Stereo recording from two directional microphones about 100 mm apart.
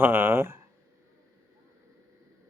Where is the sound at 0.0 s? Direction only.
20° right (ahead or behind).